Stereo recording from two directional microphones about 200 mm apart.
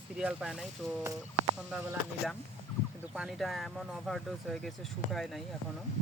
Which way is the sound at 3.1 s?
Centre (ahead or behind).